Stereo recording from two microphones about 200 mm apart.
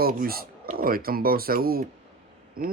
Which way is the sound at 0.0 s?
50° right (ahead or behind).